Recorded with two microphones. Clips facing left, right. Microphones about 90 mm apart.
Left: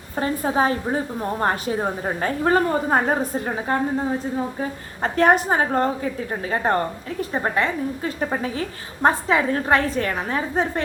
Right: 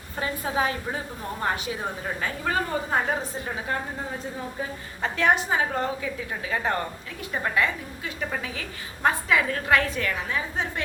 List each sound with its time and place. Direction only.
0.2 s a woman's voice: 35° left (ahead or behind)
5.0 s a woman's voice: 40° left (ahead or behind)